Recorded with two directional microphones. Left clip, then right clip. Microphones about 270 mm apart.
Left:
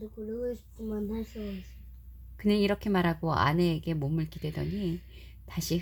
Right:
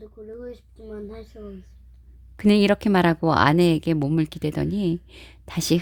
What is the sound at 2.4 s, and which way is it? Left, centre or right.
A woman's voice, right.